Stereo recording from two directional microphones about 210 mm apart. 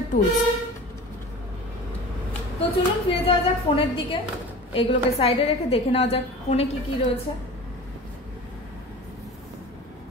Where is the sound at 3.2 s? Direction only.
25° left (ahead or behind).